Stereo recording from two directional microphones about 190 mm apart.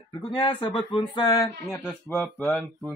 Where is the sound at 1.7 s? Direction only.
5° left (ahead or behind).